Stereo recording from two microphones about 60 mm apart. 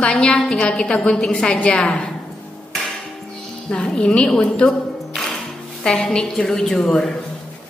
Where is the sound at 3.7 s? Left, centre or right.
Centre.